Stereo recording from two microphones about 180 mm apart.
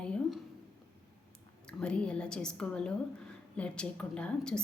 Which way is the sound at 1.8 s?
5° left (ahead or behind).